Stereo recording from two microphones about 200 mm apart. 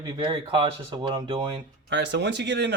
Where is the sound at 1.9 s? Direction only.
60° right (ahead or behind).